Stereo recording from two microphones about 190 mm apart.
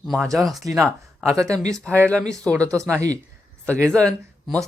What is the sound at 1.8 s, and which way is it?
Speech, 5° left (ahead or behind).